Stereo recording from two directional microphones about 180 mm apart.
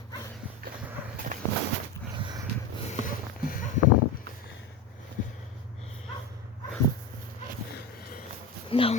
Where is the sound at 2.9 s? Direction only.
50° left (ahead or behind).